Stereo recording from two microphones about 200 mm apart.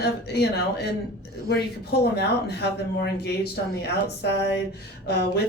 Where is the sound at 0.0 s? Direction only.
55° left (ahead or behind).